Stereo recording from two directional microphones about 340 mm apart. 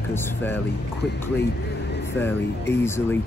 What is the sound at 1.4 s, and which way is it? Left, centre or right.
Music, left.